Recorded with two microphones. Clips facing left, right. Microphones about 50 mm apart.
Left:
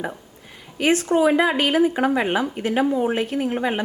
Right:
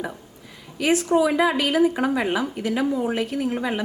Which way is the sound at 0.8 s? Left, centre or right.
Left.